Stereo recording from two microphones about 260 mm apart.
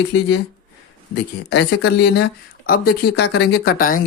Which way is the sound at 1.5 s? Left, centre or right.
Left.